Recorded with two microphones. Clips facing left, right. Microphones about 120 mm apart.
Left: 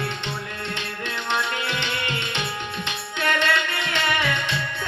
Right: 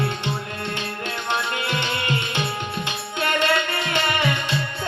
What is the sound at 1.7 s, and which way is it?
Tabla, 40° right (ahead or behind).